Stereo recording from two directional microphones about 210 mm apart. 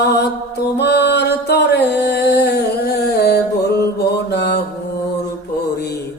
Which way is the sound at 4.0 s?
55° left (ahead or behind).